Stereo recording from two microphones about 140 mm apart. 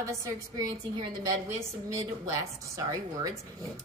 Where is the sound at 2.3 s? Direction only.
25° right (ahead or behind).